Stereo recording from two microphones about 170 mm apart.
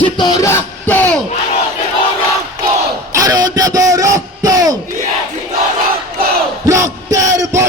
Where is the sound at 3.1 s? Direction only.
20° right (ahead or behind).